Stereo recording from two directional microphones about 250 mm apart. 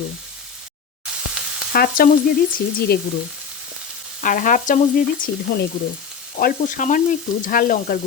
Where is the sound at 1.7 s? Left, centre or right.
Left.